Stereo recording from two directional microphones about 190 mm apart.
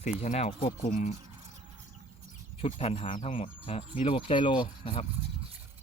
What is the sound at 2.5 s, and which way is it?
Speech, 30° left (ahead or behind).